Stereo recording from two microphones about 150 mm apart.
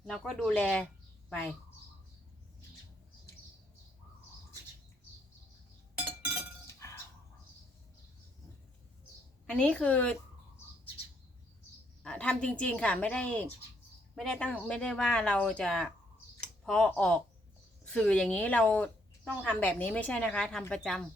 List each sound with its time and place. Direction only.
0.0 s speech: 5° left (ahead or behind)
6.1 s chink: 10° right (ahead or behind)
9.5 s speech: 5° left (ahead or behind)
12.0 s speech: 5° left (ahead or behind)